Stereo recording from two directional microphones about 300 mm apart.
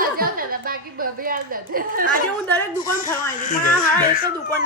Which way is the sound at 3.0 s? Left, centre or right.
Left.